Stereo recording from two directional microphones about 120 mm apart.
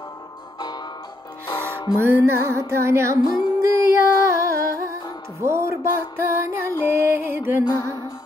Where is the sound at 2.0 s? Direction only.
20° right (ahead or behind).